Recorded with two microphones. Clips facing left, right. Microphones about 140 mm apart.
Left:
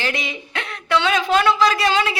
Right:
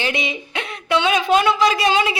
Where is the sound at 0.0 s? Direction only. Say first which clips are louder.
Right 2 dB; 20° right (ahead or behind).